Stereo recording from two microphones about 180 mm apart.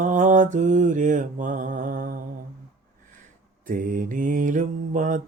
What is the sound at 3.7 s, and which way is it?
Mantra, 45° right (ahead or behind).